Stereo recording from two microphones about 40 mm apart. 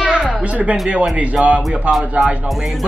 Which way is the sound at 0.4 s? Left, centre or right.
Right.